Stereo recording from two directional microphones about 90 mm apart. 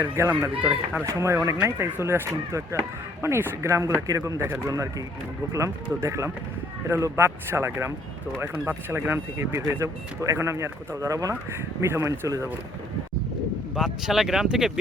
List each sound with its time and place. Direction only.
0.2 s speech: 30° right (ahead or behind)
0.6 s speech: 15° right (ahead or behind)
1.0 s speech: 30° right (ahead or behind)
4.7 s speech: 40° right (ahead or behind)
13.7 s speech: 5° right (ahead or behind)